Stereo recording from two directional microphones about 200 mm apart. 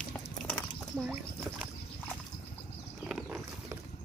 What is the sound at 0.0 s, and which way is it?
Chicken, 5° left (ahead or behind).